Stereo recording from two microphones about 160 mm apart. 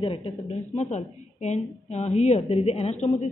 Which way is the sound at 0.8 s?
45° left (ahead or behind).